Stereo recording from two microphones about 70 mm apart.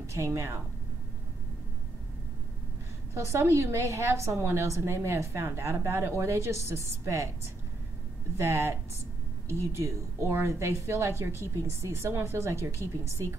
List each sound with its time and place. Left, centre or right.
0.0 s speech: right
3.2 s a woman's voice: right
8.4 s a woman's voice: right